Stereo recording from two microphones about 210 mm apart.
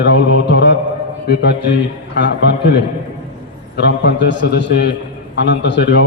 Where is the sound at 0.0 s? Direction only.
60° left (ahead or behind).